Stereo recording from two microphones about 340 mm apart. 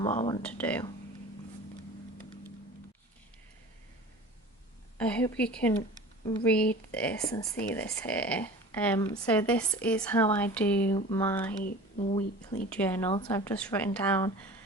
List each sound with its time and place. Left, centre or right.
0.0 s speech: centre
0.4 s speech: centre
4.9 s speech: centre
11.6 s speech: left
12.7 s speech: centre